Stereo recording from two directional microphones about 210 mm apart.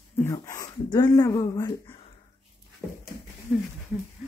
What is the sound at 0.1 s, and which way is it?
Speech, 10° left (ahead or behind).